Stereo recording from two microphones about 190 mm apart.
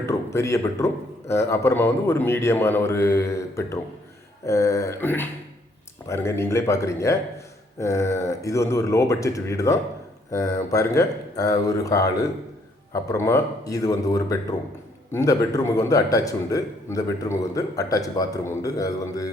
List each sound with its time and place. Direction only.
0.0 s a man's voice: 15° left (ahead or behind)